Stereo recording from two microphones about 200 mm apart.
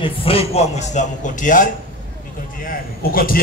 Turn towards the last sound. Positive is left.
turn(degrees=45)  # may be behind; listen again after turning